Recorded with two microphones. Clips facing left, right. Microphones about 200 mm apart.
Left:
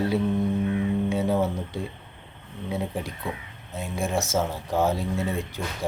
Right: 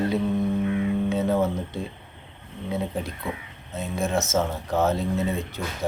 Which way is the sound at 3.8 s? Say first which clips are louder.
Right 2 dB; 15° left (ahead or behind).